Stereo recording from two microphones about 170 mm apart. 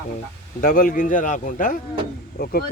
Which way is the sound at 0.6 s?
55° left (ahead or behind).